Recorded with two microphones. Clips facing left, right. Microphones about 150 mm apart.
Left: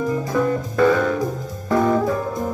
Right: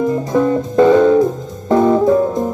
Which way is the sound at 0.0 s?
25° right (ahead or behind).